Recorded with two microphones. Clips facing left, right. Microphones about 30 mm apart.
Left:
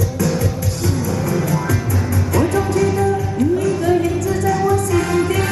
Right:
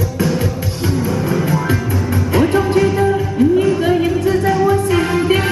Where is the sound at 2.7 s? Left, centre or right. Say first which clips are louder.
Right 3 dB; right.